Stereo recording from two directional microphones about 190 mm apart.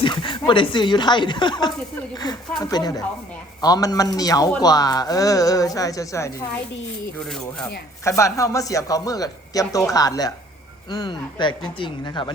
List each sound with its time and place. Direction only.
0.0 s a man's voice: 25° left (ahead or behind)
8.0 s a man's voice: 15° left (ahead or behind)